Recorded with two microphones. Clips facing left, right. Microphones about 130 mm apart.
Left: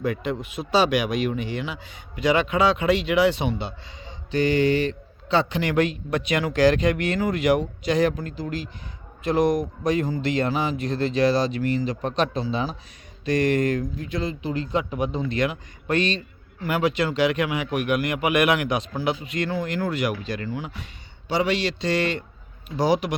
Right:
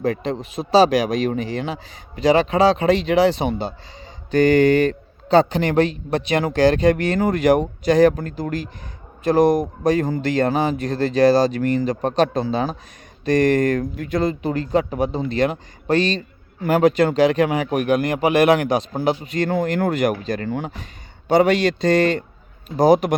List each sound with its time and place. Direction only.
0.0 s a man's voice: 35° right (ahead or behind)